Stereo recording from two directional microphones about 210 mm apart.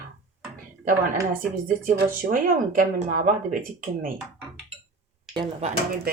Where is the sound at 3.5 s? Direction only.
40° right (ahead or behind).